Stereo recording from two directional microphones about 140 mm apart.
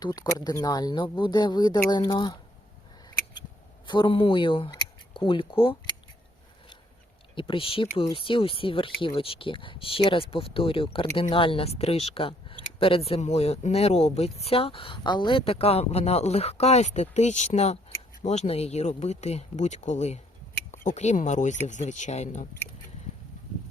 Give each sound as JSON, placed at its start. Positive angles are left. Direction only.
{"t": 0.0, "sound": "speech", "side_deg": 25}
{"t": 3.8, "sound": "speech", "side_deg": 35}
{"t": 7.3, "sound": "speech", "side_deg": 40}